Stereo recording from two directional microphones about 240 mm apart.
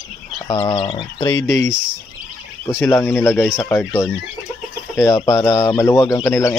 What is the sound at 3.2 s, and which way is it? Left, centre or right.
Speech, centre.